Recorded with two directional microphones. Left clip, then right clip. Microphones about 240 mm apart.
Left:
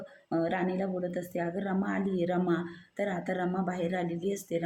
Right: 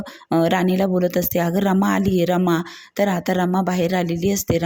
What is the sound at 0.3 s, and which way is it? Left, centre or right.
Speech, right.